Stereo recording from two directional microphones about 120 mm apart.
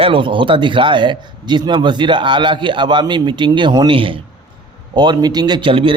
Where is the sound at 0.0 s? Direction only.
45° right (ahead or behind).